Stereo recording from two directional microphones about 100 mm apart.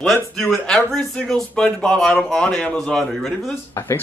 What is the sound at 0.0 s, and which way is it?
Speech, centre (ahead or behind).